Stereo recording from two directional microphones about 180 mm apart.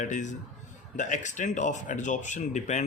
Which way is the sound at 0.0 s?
45° left (ahead or behind).